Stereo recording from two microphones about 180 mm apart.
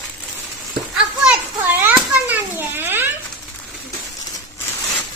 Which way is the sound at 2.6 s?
10° right (ahead or behind).